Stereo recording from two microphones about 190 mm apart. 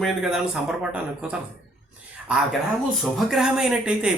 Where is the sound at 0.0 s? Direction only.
Centre (ahead or behind).